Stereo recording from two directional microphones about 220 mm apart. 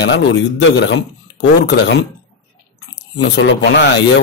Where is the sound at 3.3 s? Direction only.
50° left (ahead or behind).